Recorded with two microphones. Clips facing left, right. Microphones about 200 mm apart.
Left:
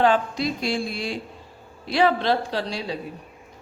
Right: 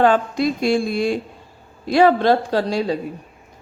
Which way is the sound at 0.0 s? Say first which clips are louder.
Right 4 dB; 50° right (ahead or behind).